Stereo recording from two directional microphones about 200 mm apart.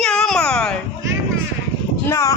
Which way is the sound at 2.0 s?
15° left (ahead or behind).